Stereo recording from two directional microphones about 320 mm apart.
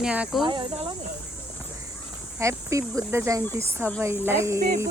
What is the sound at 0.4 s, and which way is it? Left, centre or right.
Speech, centre.